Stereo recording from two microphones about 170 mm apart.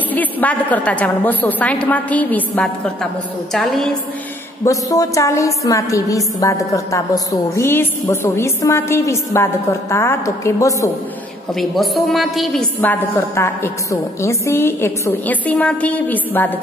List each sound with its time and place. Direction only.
0.1 s a woman's voice: 10° left (ahead or behind)
4.6 s a woman's voice: 20° left (ahead or behind)
11.5 s a woman's voice: centre (ahead or behind)
12.8 s a woman's voice: 15° left (ahead or behind)